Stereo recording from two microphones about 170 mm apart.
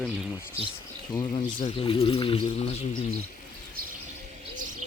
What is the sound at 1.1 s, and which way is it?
Speech, 25° left (ahead or behind).